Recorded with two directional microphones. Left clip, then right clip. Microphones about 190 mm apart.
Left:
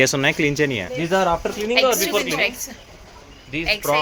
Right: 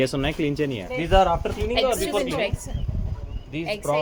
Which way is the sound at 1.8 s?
40° left (ahead or behind).